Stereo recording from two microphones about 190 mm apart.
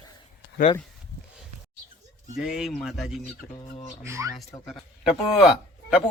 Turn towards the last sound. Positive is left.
turn(degrees=-5)  # may be behind; listen again after turning